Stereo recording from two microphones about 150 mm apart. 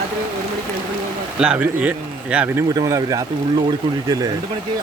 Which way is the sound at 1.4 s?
5° right (ahead or behind).